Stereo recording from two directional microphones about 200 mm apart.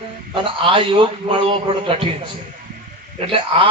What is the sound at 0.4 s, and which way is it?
A man's voice, 25° right (ahead or behind).